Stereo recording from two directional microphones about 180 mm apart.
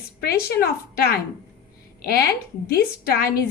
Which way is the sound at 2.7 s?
60° left (ahead or behind).